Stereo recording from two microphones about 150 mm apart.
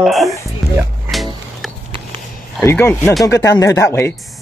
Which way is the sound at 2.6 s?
15° left (ahead or behind).